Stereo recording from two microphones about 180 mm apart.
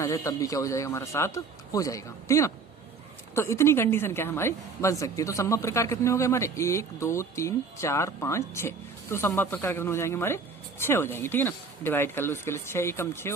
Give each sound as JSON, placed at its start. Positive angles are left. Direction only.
{"t": 0.0, "sound": "a woman's voice", "side_deg": 15}